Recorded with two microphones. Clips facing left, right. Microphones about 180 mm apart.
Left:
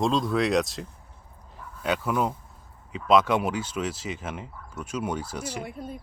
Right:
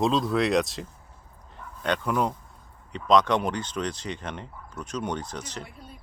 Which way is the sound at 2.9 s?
5° left (ahead or behind).